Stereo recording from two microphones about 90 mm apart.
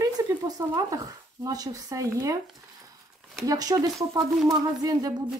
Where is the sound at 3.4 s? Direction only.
45° right (ahead or behind).